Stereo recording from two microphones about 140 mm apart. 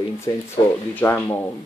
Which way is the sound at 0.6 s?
35° left (ahead or behind).